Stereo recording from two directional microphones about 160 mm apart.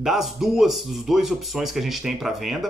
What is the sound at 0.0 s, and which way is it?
Speech, centre (ahead or behind).